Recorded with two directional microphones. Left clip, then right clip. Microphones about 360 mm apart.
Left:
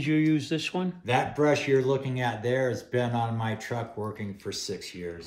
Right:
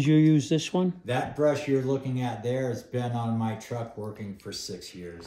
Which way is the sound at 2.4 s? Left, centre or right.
Left.